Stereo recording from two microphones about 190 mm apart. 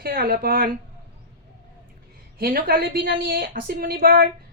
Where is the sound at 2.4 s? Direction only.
50° right (ahead or behind).